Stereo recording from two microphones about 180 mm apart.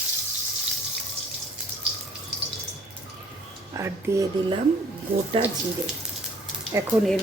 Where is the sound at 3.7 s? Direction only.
15° right (ahead or behind).